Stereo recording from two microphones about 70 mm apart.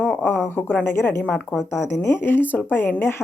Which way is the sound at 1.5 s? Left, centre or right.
Centre.